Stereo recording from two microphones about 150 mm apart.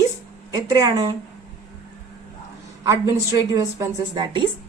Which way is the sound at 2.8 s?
20° right (ahead or behind).